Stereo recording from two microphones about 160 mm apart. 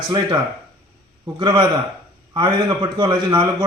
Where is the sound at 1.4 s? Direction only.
25° right (ahead or behind).